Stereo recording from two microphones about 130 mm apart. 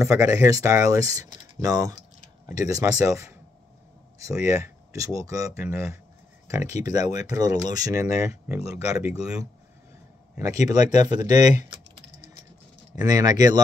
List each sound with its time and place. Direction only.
0.0 s speech: 20° right (ahead or behind)
8.5 s speech: 10° right (ahead or behind)
10.4 s speech: 25° right (ahead or behind)
13.0 s speech: 30° right (ahead or behind)